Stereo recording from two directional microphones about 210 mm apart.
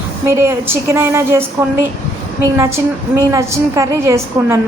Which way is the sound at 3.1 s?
15° right (ahead or behind).